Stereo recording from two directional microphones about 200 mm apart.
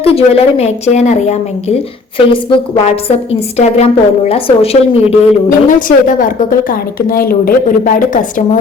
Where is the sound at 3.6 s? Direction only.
30° left (ahead or behind).